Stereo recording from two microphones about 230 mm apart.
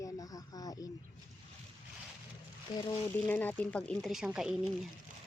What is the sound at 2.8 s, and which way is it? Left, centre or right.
Speech, centre.